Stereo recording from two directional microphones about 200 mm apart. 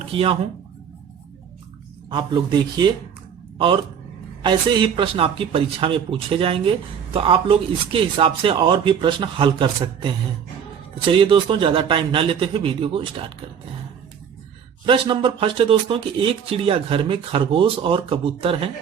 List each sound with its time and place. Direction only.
0.1 s speech: 30° right (ahead or behind)
2.0 s speech: 25° right (ahead or behind)
4.4 s speech: 25° right (ahead or behind)
14.8 s speech: 25° right (ahead or behind)